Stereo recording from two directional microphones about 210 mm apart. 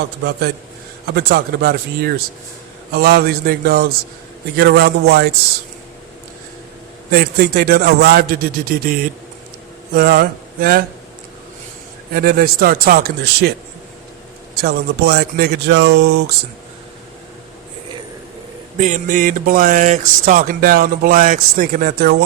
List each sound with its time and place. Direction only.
1.0 s a man's voice: 50° right (ahead or behind)
7.1 s a man's voice: 45° right (ahead or behind)
12.1 s a man's voice: 45° right (ahead or behind)
14.6 s a man's voice: 50° right (ahead or behind)
18.8 s speech: 35° right (ahead or behind)